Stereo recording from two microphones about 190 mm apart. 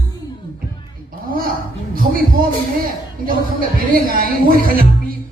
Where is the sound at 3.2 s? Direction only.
50° right (ahead or behind).